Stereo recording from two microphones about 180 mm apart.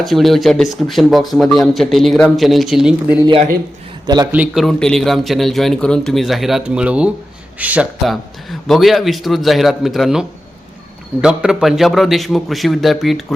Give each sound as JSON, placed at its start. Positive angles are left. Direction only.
{"t": 0.0, "sound": "speech", "side_deg": 0}
{"t": 3.2, "sound": "a man's voice", "side_deg": -30}
{"t": 4.3, "sound": "speech", "side_deg": -5}